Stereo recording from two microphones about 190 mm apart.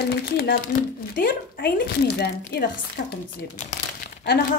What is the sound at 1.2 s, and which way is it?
Speech, 50° left (ahead or behind).